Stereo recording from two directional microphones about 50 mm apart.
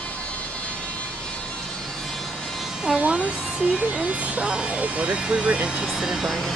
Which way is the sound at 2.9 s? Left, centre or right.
Centre.